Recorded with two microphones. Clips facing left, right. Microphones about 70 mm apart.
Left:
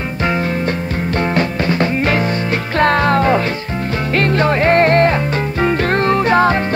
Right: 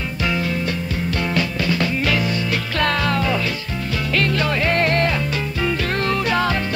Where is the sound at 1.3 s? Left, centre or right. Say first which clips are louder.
Left 5 dB; left.